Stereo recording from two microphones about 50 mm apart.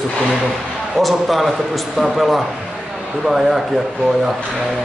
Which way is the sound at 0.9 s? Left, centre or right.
Centre.